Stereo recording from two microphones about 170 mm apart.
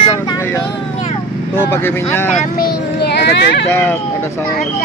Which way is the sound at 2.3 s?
70° left (ahead or behind).